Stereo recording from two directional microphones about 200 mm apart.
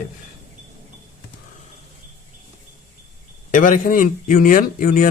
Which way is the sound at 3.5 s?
40° left (ahead or behind).